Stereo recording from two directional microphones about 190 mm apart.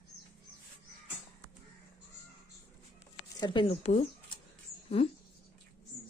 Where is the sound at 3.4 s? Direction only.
25° left (ahead or behind).